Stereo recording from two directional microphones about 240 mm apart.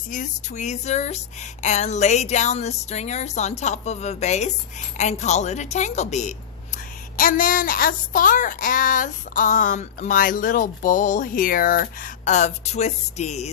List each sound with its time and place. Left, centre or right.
0.1 s speech: left